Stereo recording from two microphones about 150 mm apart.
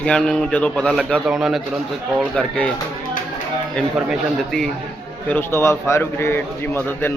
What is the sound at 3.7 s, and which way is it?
Speech, 5° left (ahead or behind).